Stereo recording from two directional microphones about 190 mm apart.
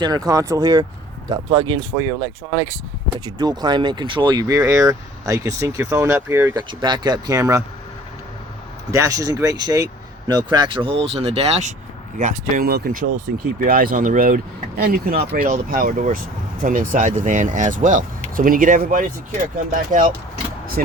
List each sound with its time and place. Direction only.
0.0 s speech: 20° right (ahead or behind)
8.9 s speech: 15° right (ahead or behind); by 20.9 s 45° right (ahead or behind)